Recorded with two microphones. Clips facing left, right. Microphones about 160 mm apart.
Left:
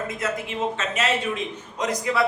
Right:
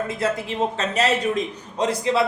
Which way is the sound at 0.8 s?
35° right (ahead or behind).